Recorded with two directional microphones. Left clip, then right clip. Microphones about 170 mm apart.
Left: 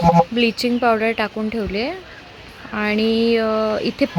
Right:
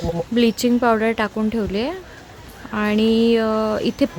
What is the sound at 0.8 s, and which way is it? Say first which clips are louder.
Speech: left 2 dB; 15° right (ahead or behind).